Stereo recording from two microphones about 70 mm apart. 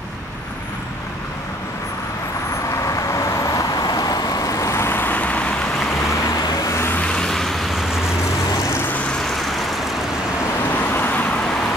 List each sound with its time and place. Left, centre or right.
2.8 s vehicle: left
6.3 s vehicle: left
7.1 s vehicle: centre
9.3 s vehicle: centre
10.8 s vehicle: left